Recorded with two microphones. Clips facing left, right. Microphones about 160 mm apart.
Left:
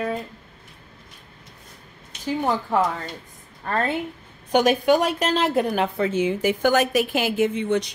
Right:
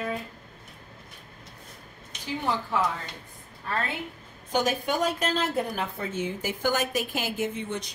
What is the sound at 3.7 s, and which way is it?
Speech, 50° left (ahead or behind).